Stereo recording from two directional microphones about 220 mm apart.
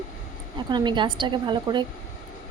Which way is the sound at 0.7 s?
20° right (ahead or behind).